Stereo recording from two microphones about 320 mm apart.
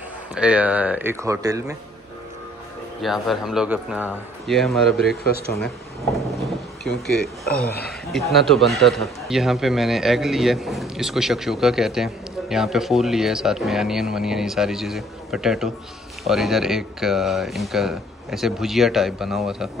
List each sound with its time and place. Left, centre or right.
0.3 s a man's voice: centre
3.0 s a man's voice: centre
6.4 s a sound: centre
7.4 s speech: left
8.1 s a man's voice: centre